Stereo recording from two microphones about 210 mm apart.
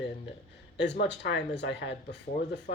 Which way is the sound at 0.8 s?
55° left (ahead or behind).